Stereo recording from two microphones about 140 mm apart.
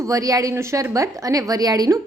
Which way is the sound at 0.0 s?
25° right (ahead or behind).